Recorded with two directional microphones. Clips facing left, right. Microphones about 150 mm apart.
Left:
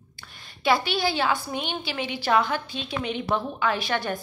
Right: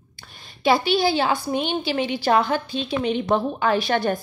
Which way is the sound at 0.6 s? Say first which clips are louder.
Right 5 dB; 30° right (ahead or behind).